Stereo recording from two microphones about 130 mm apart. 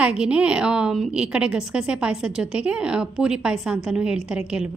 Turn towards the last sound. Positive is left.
turn(degrees=-5)  # may be behind; listen again after turning